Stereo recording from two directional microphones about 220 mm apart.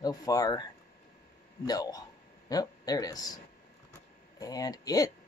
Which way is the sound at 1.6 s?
15° left (ahead or behind).